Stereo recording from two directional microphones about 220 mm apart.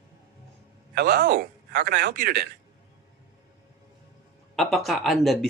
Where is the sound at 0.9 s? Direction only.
45° right (ahead or behind).